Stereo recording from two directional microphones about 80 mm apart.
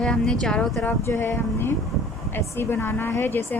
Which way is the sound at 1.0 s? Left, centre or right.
Left.